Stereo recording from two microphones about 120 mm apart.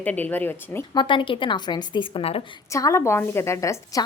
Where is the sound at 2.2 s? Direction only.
55° left (ahead or behind).